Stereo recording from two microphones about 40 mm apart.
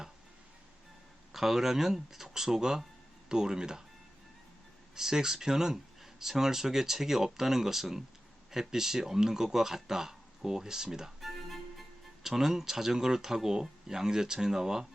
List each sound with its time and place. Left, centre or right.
1.3 s speech: centre
4.9 s speech: centre
11.2 s speech: centre